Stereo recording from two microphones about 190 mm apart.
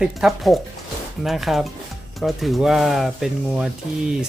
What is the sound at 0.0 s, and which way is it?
Speech, centre (ahead or behind).